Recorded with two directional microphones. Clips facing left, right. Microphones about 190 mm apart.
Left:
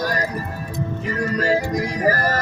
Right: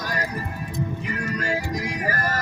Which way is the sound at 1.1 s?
35° left (ahead or behind).